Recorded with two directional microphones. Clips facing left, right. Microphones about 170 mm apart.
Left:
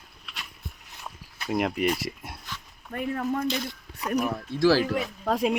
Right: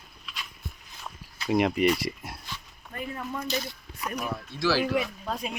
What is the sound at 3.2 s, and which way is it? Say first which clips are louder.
Speech: left 4 dB; 50° left (ahead or behind).